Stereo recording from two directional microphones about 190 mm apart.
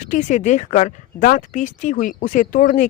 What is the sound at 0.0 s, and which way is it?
Speech, 40° left (ahead or behind).